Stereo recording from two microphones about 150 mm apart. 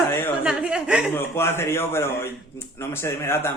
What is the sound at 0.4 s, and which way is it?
Chuckle, 5° right (ahead or behind).